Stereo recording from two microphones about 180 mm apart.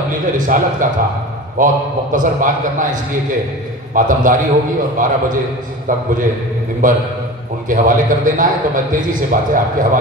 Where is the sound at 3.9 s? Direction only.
50° right (ahead or behind).